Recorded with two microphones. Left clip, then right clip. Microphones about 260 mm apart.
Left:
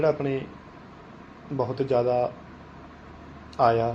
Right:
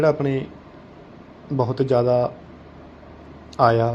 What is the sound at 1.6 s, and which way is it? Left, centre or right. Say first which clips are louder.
Speech: right 4 dB; right.